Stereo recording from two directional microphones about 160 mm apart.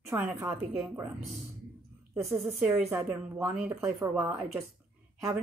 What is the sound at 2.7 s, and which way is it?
A woman's voice, 20° right (ahead or behind).